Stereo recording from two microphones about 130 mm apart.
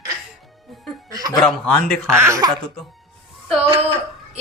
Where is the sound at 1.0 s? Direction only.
30° right (ahead or behind).